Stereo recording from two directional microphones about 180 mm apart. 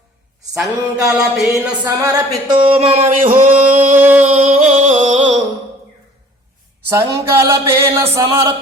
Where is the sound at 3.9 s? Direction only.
10° right (ahead or behind).